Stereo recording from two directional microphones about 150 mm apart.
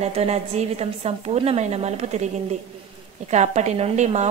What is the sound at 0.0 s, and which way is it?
A woman's voice, 45° right (ahead or behind).